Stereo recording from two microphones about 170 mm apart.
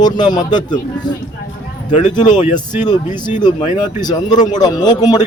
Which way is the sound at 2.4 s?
35° left (ahead or behind).